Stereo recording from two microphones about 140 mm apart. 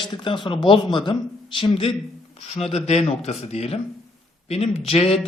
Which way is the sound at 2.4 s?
50° left (ahead or behind).